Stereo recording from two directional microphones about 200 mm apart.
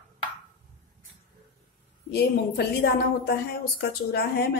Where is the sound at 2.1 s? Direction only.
55° left (ahead or behind).